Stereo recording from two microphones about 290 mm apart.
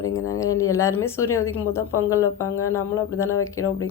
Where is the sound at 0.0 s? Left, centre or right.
Centre.